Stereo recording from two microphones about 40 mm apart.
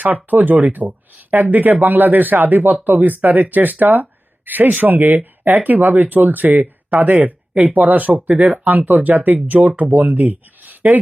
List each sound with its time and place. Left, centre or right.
0.0 s speech: right